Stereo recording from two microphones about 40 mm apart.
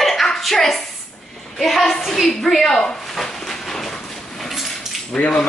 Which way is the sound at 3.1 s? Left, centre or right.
Centre.